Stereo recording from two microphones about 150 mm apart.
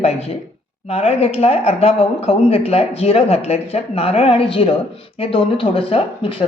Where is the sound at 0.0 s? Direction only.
45° left (ahead or behind).